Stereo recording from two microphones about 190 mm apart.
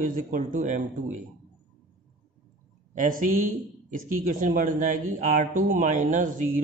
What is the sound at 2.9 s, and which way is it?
Speech, 45° right (ahead or behind).